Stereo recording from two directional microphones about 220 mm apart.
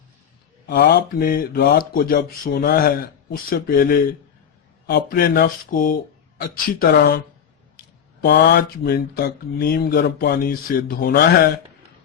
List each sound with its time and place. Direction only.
0.7 s speech: 40° left (ahead or behind)
8.2 s speech: 45° left (ahead or behind)